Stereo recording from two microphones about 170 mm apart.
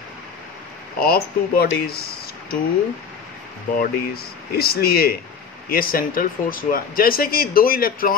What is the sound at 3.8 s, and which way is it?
Speech, 65° left (ahead or behind).